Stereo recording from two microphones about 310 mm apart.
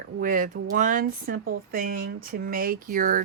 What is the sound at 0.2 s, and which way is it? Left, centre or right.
Speech, right.